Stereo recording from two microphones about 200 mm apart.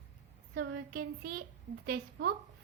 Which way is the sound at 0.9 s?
50° right (ahead or behind).